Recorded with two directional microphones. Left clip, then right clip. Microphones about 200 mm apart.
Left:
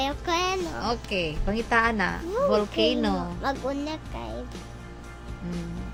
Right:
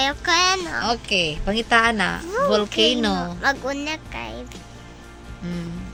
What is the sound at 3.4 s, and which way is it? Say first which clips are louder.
Speech: right 7 dB; 5° left (ahead or behind).